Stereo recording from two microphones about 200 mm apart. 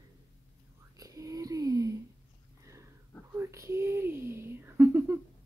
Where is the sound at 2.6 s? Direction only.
15° right (ahead or behind).